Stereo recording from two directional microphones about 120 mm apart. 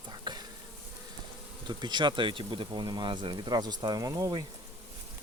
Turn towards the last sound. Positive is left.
turn(degrees=-30)  # may be behind; listen again after turning